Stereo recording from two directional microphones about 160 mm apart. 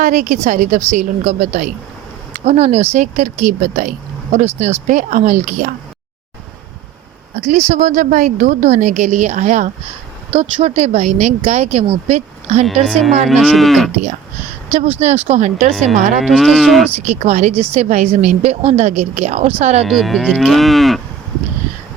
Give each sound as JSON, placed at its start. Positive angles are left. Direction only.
{"t": 0.0, "sound": "a woman's voice", "side_deg": -50}
{"t": 7.3, "sound": "a woman's voice", "side_deg": -50}
{"t": 12.8, "sound": "moo", "side_deg": 0}
{"t": 14.9, "sound": "a woman's voice", "side_deg": -40}
{"t": 16.2, "sound": "moo", "side_deg": 0}
{"t": 17.1, "sound": "a woman's voice", "side_deg": -45}
{"t": 19.8, "sound": "moo", "side_deg": 0}